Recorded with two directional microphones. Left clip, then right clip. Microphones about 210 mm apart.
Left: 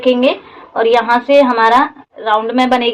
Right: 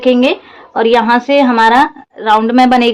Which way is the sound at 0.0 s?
35° right (ahead or behind).